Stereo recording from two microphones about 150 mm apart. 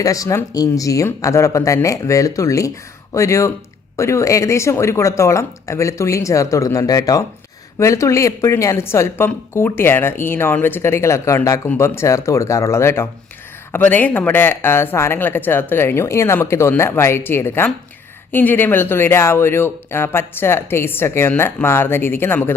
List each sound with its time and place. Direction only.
0.0 s speech: 20° left (ahead or behind)